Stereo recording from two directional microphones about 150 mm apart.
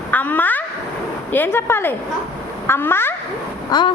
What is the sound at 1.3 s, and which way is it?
Speech, 15° left (ahead or behind).